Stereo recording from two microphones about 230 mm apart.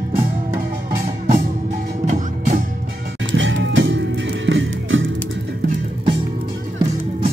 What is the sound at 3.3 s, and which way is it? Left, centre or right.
Music, right.